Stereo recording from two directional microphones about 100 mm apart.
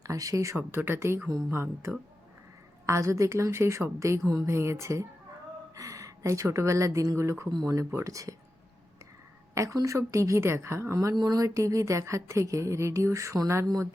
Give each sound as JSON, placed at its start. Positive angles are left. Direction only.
{"t": 0.0, "sound": "a woman's voice", "side_deg": -35}
{"t": 9.6, "sound": "speech", "side_deg": -30}